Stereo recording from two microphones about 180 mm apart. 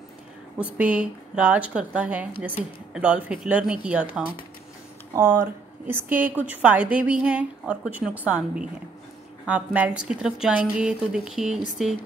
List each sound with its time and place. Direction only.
0.6 s a woman's voice: 10° right (ahead or behind)